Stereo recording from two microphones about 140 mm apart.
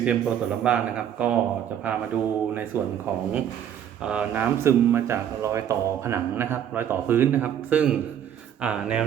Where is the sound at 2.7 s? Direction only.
15° right (ahead or behind).